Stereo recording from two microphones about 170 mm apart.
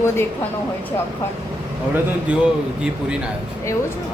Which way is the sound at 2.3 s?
10° right (ahead or behind).